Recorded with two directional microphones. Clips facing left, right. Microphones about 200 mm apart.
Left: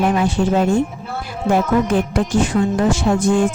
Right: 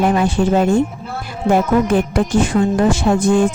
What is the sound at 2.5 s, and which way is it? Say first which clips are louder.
Speech: right 2 dB; 40° right (ahead or behind).